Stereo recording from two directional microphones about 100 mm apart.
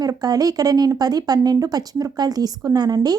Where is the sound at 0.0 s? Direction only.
40° right (ahead or behind).